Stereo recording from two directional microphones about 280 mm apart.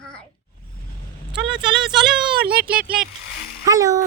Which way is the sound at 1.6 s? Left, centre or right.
Centre.